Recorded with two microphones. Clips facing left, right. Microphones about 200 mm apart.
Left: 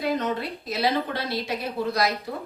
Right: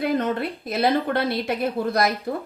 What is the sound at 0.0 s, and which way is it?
A woman's voice, 55° right (ahead or behind).